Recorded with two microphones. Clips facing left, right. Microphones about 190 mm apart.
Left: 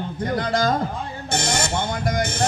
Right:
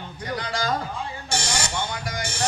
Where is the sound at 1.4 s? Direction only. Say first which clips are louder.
Left 7 dB; 55° left (ahead or behind).